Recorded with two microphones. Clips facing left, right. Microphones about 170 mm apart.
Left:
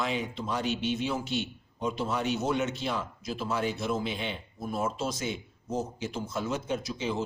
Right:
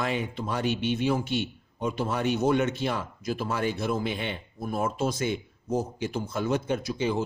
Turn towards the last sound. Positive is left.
turn(degrees=-55)  # may be behind; listen again after turning